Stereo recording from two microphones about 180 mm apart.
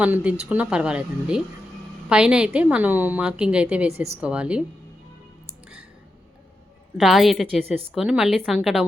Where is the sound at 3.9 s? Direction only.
35° right (ahead or behind).